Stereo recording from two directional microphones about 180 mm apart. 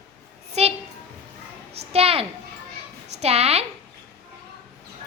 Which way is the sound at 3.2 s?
35° right (ahead or behind).